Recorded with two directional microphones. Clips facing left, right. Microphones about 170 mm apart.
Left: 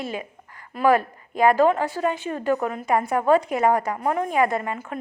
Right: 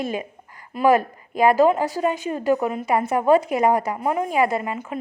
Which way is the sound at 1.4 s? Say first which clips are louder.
Right 1 dB; 10° right (ahead or behind).